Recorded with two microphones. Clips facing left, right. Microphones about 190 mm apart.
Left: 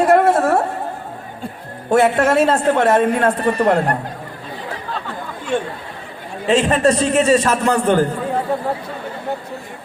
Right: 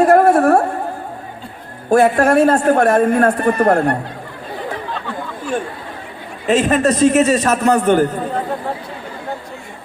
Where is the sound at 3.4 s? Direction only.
50° right (ahead or behind).